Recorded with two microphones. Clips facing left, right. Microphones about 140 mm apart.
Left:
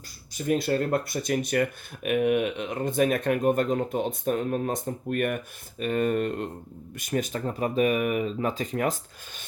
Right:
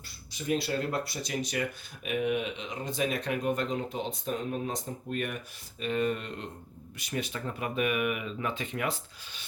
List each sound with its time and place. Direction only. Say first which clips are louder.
0.3 s speech: left 5 dB; 50° left (ahead or behind)